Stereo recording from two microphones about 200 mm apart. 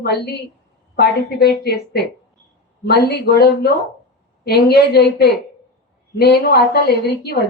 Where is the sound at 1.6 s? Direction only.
50° left (ahead or behind).